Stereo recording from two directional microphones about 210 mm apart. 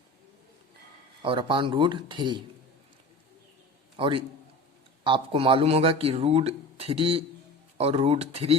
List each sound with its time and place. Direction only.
1.2 s speech: 25° right (ahead or behind)
3.9 s a man's voice: 25° right (ahead or behind)